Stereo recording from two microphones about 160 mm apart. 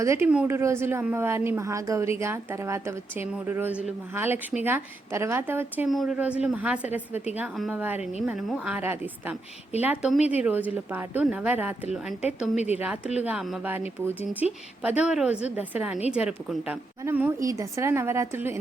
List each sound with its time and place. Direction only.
0.0 s speech: 15° right (ahead or behind)
5.9 s speech: centre (ahead or behind)
12.5 s speech: 45° left (ahead or behind)
13.2 s speech: 5° right (ahead or behind)